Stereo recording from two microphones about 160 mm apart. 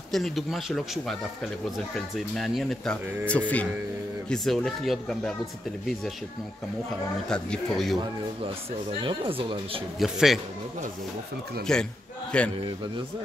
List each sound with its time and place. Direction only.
0.1 s speech: centre (ahead or behind)
7.2 s speech: 5° left (ahead or behind)
9.0 s speech: 30° right (ahead or behind)
9.9 s speech: centre (ahead or behind)
11.6 s a man's voice: 5° left (ahead or behind)